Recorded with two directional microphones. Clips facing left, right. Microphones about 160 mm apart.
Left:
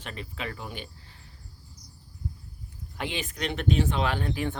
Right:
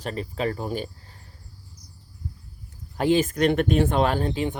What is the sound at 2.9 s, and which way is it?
Speech, 40° right (ahead or behind).